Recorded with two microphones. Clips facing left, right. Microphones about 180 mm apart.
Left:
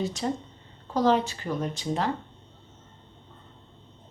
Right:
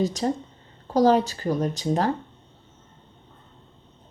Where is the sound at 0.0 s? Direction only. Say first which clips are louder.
Right 5 dB; 40° right (ahead or behind).